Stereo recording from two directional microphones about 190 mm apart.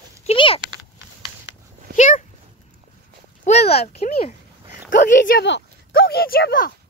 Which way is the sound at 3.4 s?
35° left (ahead or behind).